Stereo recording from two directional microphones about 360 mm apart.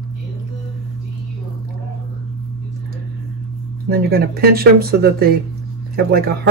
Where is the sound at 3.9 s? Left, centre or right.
Right.